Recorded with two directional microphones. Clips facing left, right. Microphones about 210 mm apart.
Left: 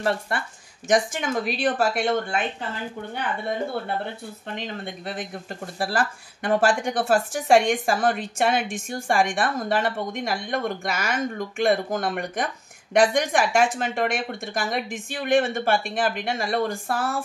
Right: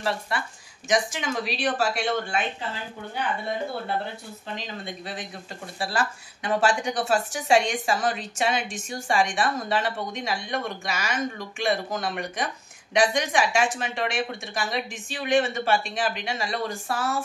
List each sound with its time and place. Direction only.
0.0 s speech: 50° left (ahead or behind)
4.6 s speech: 55° left (ahead or behind)